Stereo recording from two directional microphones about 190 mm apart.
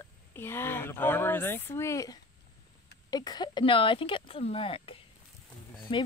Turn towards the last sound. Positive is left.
turn(degrees=25)  # may be behind; listen again after turning